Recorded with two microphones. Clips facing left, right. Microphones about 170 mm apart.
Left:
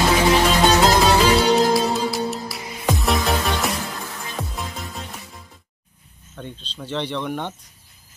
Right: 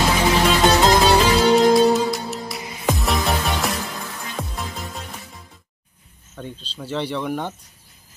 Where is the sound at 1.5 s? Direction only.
Centre (ahead or behind).